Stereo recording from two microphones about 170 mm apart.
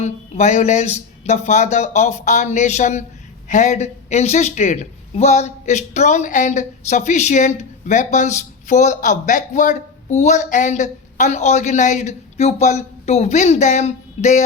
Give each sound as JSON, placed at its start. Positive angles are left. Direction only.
{"t": 0.0, "sound": "a woman's voice", "side_deg": 45}